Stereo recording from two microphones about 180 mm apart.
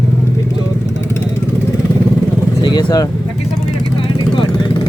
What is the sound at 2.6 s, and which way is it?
Speech, 20° left (ahead or behind).